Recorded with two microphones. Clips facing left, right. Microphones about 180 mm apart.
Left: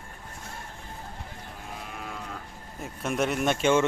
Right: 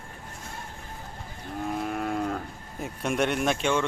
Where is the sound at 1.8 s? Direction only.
50° right (ahead or behind).